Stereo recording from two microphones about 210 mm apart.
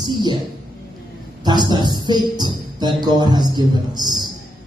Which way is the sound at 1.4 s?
20° right (ahead or behind).